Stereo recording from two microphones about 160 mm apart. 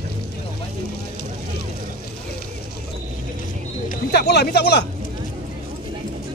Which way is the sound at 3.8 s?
90° left.